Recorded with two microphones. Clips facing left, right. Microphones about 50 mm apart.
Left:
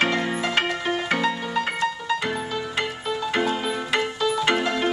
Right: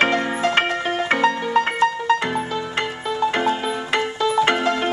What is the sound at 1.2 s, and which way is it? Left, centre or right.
Music, right.